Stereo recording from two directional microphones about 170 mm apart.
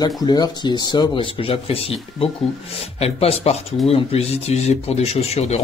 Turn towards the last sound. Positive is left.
turn(degrees=40)  # may be behind; listen again after turning